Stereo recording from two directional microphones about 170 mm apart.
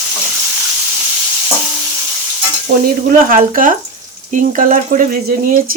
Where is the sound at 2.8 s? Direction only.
55° right (ahead or behind).